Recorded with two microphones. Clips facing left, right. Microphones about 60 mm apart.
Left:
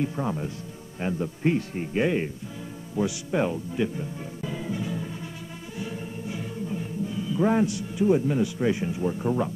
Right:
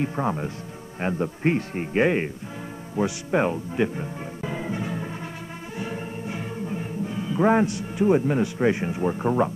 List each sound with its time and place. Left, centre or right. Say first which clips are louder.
0.0 s a man's voice: right 2 dB; right
5.8 s music: right 2 dB; right